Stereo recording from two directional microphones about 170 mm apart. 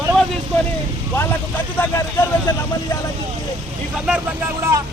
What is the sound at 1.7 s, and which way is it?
Speech, 15° left (ahead or behind).